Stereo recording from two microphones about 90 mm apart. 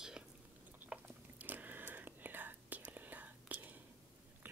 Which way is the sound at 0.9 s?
20° right (ahead or behind).